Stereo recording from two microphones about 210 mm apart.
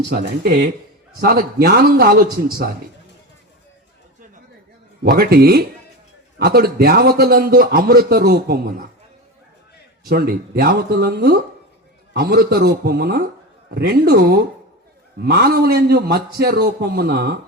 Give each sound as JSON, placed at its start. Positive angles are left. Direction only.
{"t": 0.1, "sound": "a man's voice", "side_deg": -40}
{"t": 5.0, "sound": "a man's voice", "side_deg": -45}
{"t": 10.1, "sound": "a man's voice", "side_deg": -45}